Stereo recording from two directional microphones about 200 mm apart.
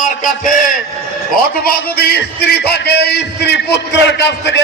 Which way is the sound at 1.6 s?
50° left (ahead or behind).